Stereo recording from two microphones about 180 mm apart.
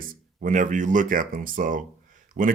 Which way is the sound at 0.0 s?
45° right (ahead or behind).